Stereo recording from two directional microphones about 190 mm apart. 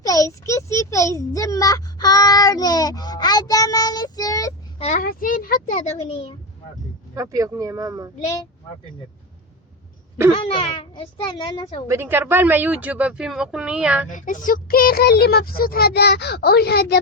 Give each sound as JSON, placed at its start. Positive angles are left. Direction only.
{"t": 0.0, "sound": "a child's voice", "side_deg": 20}
{"t": 4.8, "sound": "a child's voice", "side_deg": 35}
{"t": 5.0, "sound": "a sound", "side_deg": 50}
{"t": 7.2, "sound": "speech", "side_deg": -15}
{"t": 10.3, "sound": "a child's voice", "side_deg": 30}
{"t": 11.9, "sound": "speech", "side_deg": -10}
{"t": 14.1, "sound": "speech", "side_deg": 45}